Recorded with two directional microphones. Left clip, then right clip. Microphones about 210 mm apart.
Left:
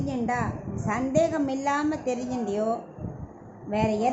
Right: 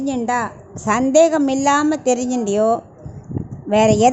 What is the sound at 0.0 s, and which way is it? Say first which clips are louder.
A woman's voice: right 8 dB; 45° right (ahead or behind).